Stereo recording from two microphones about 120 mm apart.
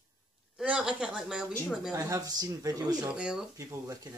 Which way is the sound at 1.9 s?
30° right (ahead or behind).